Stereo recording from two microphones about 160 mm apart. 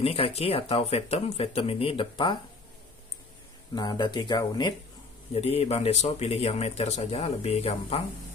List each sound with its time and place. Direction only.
0.0 s speech: 40° left (ahead or behind)
3.7 s speech: 25° left (ahead or behind)
5.3 s speech: 40° left (ahead or behind)